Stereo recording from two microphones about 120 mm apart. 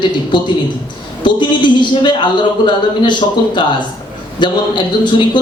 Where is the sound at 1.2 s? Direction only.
40° left (ahead or behind).